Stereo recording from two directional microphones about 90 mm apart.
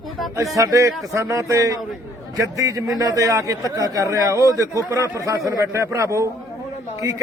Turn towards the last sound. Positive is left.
turn(degrees=-35)  # may be behind; listen again after turning